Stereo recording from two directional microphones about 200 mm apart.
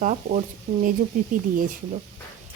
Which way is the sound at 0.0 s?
40° right (ahead or behind).